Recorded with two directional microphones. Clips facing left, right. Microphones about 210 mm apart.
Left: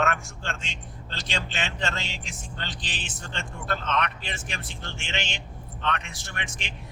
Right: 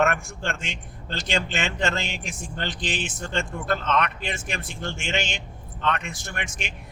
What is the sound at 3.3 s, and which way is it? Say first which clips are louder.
Speech: right 5 dB; 50° right (ahead or behind).